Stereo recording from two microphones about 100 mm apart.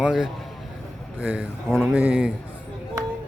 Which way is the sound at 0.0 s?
5° right (ahead or behind).